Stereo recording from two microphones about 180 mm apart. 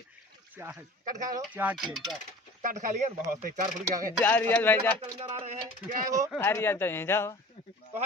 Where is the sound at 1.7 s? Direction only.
Centre (ahead or behind).